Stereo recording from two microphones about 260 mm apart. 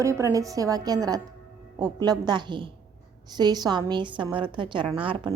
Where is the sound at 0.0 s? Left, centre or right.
Centre.